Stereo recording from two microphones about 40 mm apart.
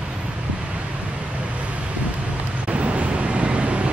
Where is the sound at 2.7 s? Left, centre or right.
Right.